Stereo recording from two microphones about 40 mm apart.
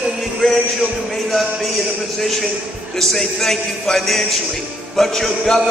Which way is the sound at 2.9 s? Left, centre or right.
Centre.